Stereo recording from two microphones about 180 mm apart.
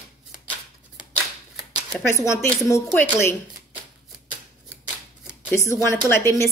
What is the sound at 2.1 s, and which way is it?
Speech, 15° left (ahead or behind).